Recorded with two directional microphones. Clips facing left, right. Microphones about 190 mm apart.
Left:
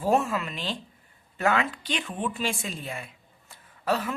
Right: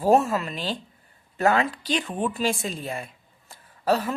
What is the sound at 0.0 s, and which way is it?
A woman's voice, 40° right (ahead or behind).